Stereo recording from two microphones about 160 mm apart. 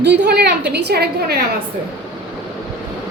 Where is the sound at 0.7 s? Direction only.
90° right.